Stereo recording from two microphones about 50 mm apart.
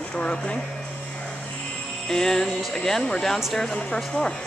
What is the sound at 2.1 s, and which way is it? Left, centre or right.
Speech, centre.